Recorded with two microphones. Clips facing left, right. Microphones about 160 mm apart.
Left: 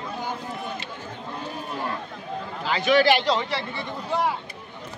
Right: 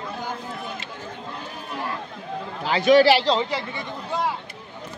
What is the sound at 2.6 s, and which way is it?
Speech, 40° right (ahead or behind).